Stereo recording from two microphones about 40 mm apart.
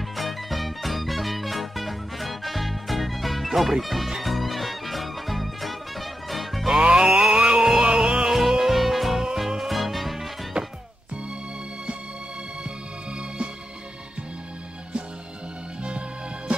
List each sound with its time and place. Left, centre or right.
0.1 s music: centre
6.8 s music: right; by 10.3 s centre
10.6 s music: centre